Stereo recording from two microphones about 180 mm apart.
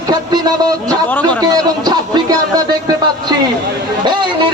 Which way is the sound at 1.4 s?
20° right (ahead or behind).